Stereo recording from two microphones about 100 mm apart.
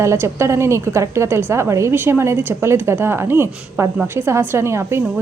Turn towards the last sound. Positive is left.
turn(degrees=-25)  # may be behind; listen again after turning